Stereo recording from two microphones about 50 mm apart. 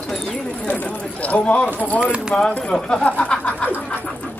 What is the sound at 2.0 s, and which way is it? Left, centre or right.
Speech, right.